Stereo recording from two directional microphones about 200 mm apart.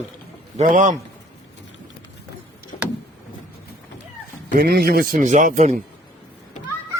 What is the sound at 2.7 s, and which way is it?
Vehicle, 35° left (ahead or behind).